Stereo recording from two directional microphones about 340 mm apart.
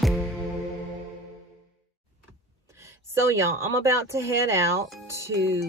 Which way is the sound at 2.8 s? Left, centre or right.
Centre.